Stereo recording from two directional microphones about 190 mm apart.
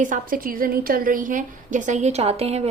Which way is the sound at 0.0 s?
45° right (ahead or behind).